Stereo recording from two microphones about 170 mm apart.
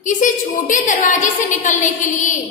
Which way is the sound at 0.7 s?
45° left (ahead or behind).